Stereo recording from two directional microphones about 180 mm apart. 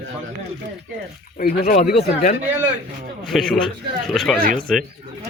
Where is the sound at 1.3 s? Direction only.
55° left (ahead or behind).